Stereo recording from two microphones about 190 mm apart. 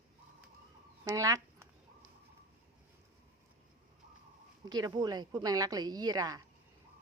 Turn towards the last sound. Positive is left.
turn(degrees=-20)  # may be behind; listen again after turning